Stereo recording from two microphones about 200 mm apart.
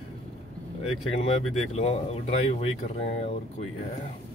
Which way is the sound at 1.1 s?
30° left (ahead or behind).